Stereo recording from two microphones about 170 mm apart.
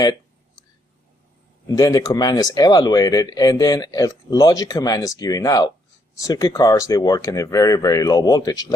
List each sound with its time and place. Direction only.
1.6 s speech: 20° left (ahead or behind)